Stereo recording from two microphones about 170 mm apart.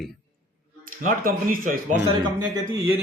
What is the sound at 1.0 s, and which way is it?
Speech, 55° right (ahead or behind).